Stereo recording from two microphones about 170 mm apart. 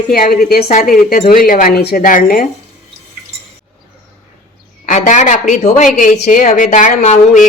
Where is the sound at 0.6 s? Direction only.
50° left (ahead or behind).